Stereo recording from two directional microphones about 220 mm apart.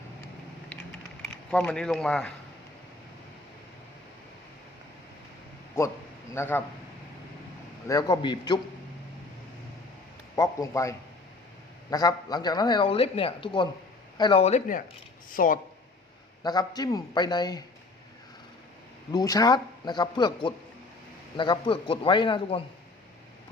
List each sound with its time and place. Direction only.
1.2 s speech: 5° left (ahead or behind)
5.7 s a man's voice: 15° left (ahead or behind)
7.9 s a man's voice: 15° left (ahead or behind)
10.3 s a man's voice: 15° left (ahead or behind); by 15.5 s 40° left (ahead or behind)
16.4 s a man's voice: 15° left (ahead or behind)
19.1 s speech: 15° left (ahead or behind)